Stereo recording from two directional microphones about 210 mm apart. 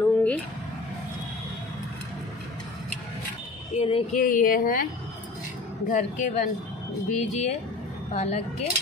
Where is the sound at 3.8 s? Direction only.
30° left (ahead or behind).